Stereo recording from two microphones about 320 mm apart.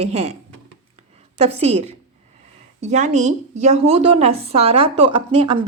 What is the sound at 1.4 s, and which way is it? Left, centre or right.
A woman's voice, centre.